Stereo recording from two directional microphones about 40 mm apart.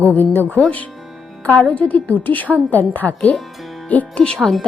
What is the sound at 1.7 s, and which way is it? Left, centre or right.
A woman's voice, left.